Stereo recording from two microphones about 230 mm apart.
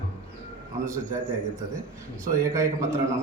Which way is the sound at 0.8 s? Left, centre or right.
Centre.